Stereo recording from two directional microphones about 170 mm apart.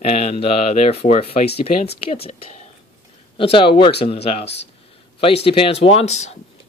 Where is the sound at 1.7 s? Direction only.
70° left (ahead or behind).